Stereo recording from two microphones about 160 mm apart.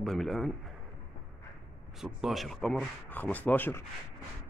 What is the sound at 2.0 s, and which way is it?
Speech, centre (ahead or behind).